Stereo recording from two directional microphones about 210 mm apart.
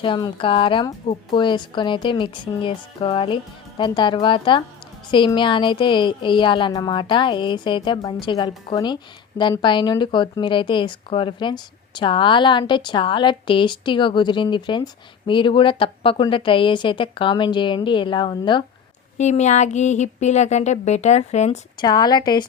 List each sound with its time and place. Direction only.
0.0 s speech: 20° left (ahead or behind)
19.1 s speech: 35° left (ahead or behind)
21.8 s speech: 20° left (ahead or behind)